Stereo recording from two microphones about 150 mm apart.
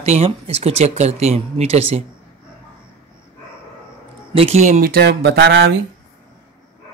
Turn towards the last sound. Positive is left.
turn(degrees=-90)